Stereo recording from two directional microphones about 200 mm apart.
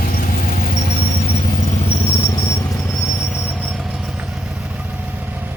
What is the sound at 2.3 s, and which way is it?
Vehicle, 15° left (ahead or behind).